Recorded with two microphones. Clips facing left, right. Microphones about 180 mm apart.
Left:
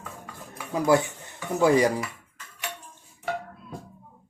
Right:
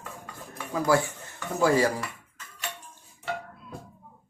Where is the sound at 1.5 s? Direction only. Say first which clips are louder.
Left 3 dB; 20° left (ahead or behind).